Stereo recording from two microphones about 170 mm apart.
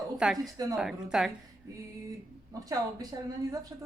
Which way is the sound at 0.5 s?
20° right (ahead or behind).